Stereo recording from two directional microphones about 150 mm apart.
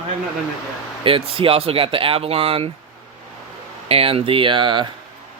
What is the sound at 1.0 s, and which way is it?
Speech, 35° right (ahead or behind).